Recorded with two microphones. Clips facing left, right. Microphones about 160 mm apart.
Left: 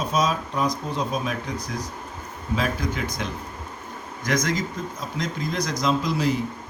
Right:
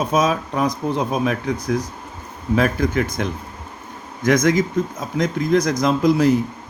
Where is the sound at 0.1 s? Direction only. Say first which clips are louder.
Right 5 dB; 55° right (ahead or behind).